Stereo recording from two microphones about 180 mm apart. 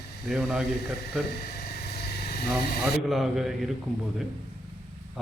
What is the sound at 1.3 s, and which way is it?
Vehicle, 60° left (ahead or behind).